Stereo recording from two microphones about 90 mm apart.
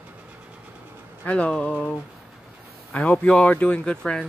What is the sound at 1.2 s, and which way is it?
Speech, 10° left (ahead or behind).